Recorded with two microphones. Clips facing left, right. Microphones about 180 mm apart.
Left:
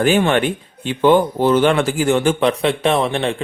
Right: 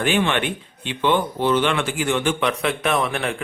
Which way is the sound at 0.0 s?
40° left (ahead or behind).